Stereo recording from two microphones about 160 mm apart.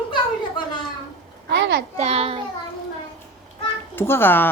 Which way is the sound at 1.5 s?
90° right.